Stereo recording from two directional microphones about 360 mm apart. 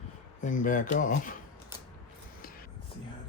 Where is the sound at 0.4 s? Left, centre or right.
Left.